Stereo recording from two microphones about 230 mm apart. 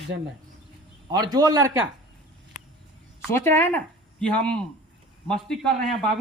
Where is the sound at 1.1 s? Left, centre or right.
Centre.